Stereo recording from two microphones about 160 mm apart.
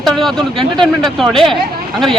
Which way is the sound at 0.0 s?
Centre (ahead or behind).